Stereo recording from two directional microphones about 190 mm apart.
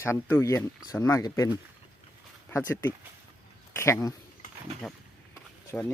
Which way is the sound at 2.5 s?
15° left (ahead or behind).